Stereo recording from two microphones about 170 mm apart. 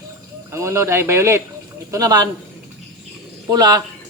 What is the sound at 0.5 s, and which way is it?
Speech, 15° right (ahead or behind).